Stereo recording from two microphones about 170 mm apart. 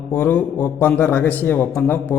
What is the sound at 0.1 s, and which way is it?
Speech, 10° left (ahead or behind).